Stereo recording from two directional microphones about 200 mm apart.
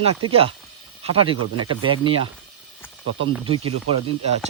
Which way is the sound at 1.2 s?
25° right (ahead or behind).